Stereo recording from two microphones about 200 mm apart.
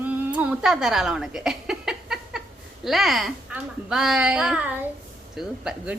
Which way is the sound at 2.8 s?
Centre (ahead or behind).